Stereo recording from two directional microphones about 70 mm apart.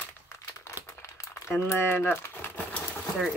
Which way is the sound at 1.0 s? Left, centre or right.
Left.